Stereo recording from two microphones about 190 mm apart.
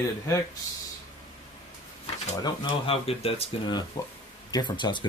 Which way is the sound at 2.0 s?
25° left (ahead or behind).